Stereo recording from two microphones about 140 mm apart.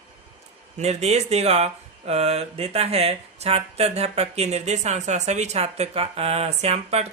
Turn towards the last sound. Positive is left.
turn(degrees=-50)  # may be behind; listen again after turning